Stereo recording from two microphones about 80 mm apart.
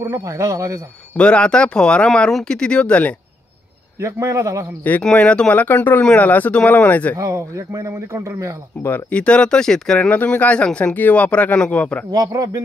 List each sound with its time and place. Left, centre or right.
0.0 s speech: right
1.1 s speech: centre
4.0 s a man's voice: right
5.1 s speech: centre
7.2 s a man's voice: right
8.8 s speech: left
12.3 s speech: right